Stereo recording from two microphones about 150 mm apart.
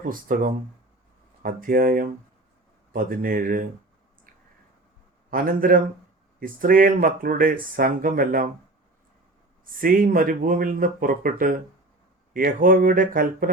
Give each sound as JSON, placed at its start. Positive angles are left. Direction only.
{"t": 0.0, "sound": "speech", "side_deg": -70}
{"t": 5.3, "sound": "speech", "side_deg": -70}
{"t": 9.8, "sound": "speech", "side_deg": -65}